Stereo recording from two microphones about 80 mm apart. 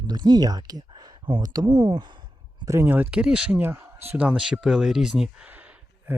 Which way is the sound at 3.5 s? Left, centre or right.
Right.